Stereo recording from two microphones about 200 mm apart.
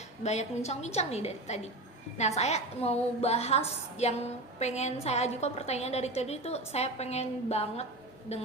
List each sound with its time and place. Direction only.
0.2 s a woman's voice: 35° left (ahead or behind)